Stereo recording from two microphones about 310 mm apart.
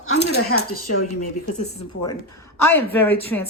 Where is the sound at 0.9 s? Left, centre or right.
Left.